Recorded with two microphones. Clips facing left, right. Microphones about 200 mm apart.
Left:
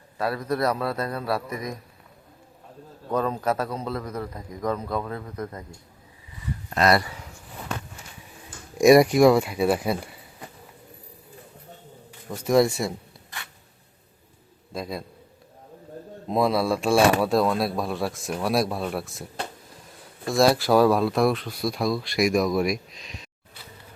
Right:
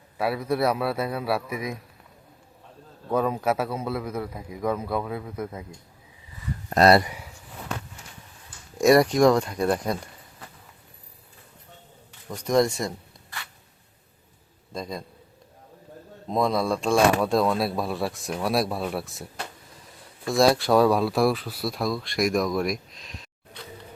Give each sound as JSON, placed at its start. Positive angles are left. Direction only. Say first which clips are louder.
{"t": 0.2, "sound": "a man's voice", "louder": "right 1 dB", "side_deg": -10}
{"t": 3.1, "sound": "a man's voice", "louder": "right 1 dB", "side_deg": -10}
{"t": 6.7, "sound": "speech", "louder": "right 4 dB", "side_deg": -40}
{"t": 6.9, "sound": "speech", "louder": "right 3 dB", "side_deg": -20}
{"t": 8.8, "sound": "speech", "louder": "left 3 dB", "side_deg": 10}
{"t": 12.3, "sound": "speech", "louder": "left 2 dB", "side_deg": 5}
{"t": 14.7, "sound": "a man's voice", "louder": "left 1 dB", "side_deg": 5}
{"t": 16.3, "sound": "speech", "louder": "left 1 dB", "side_deg": 5}